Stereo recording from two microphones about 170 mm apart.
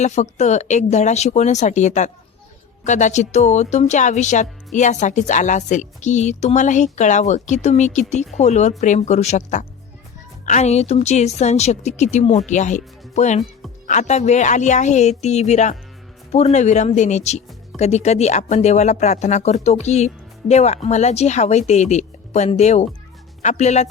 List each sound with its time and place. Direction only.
0.0 s speech: 45° left (ahead or behind)